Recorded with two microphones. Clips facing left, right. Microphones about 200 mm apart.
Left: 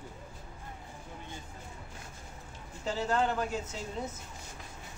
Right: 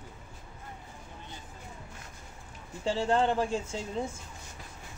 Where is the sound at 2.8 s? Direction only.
30° right (ahead or behind).